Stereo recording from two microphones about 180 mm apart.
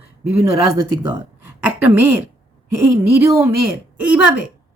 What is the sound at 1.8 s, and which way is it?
Speech, 10° right (ahead or behind).